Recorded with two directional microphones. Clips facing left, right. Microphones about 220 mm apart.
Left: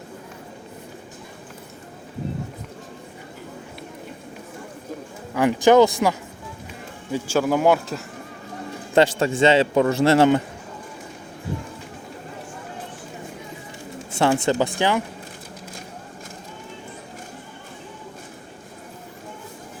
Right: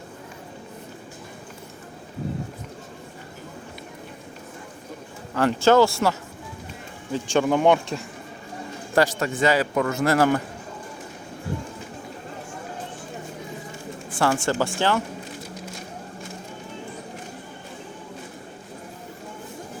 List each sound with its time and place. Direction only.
5.3 s speech: 15° left (ahead or behind)
7.1 s speech: 5° left (ahead or behind)
9.0 s a man's voice: 30° left (ahead or behind)
14.1 s bird: 25° left (ahead or behind)
14.4 s a man's voice: 20° left (ahead or behind)